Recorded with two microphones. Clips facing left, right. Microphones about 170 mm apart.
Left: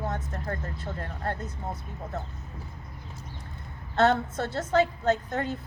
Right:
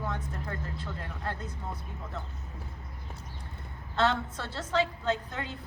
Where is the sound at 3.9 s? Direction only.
45° left (ahead or behind).